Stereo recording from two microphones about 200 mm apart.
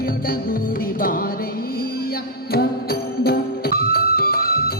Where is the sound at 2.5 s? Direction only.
50° left (ahead or behind).